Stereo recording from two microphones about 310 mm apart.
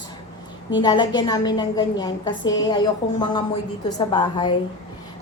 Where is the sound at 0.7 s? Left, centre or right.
Centre.